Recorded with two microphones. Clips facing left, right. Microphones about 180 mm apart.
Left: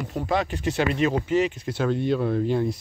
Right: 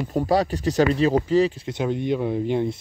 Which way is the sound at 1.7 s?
15° right (ahead or behind).